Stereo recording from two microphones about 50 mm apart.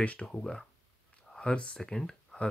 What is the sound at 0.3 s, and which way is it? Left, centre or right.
Speech, centre.